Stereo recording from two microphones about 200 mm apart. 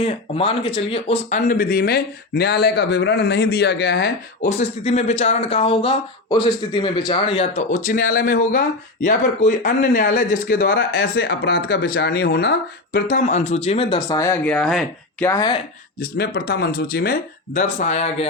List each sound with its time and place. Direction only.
0.0 s a man's voice: 30° left (ahead or behind); by 4.1 s 60° left (ahead or behind)
4.4 s a man's voice: 35° left (ahead or behind)
7.4 s speech: 40° left (ahead or behind); by 13.0 s 55° left (ahead or behind)
13.1 s speech: 40° left (ahead or behind)
13.7 s speech: 25° left (ahead or behind); by 15.3 s 5° left (ahead or behind)
15.3 s a man's voice: 20° left (ahead or behind)
16.0 s speech: 50° left (ahead or behind); by 18.3 s 35° left (ahead or behind)